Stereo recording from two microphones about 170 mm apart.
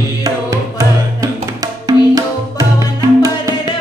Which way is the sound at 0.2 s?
20° right (ahead or behind).